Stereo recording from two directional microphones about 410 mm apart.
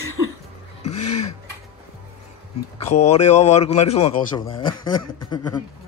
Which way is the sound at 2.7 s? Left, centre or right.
Centre.